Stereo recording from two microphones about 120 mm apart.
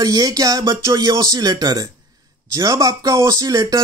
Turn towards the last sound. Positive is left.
turn(degrees=-30)  # may be behind; listen again after turning